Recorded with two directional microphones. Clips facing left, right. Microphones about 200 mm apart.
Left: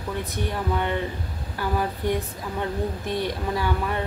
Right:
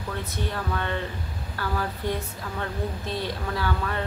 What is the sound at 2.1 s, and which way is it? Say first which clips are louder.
Speech: left 4 dB; 15° left (ahead or behind).